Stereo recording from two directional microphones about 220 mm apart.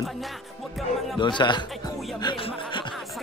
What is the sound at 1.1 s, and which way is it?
Speech, 20° left (ahead or behind).